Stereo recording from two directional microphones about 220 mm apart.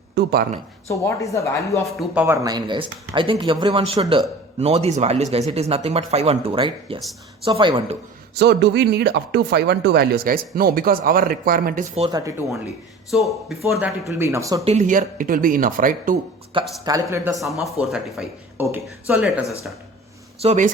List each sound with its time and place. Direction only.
0.2 s speech: 45° right (ahead or behind)
0.9 s speech: 15° left (ahead or behind)
1.8 s speech: 5° right (ahead or behind); by 7.9 s 25° right (ahead or behind)
8.4 s speech: 50° right (ahead or behind)
12.0 s speech: 15° right (ahead or behind)
13.1 s a man's voice: centre (ahead or behind)
14.1 s speech: 15° right (ahead or behind)
14.6 s speech: 30° right (ahead or behind)
16.8 s speech: 15° right (ahead or behind)
17.3 s a man's voice: centre (ahead or behind)
20.4 s speech: 30° right (ahead or behind)